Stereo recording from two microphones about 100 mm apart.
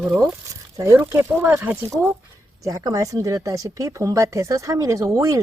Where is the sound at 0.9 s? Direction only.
25° right (ahead or behind).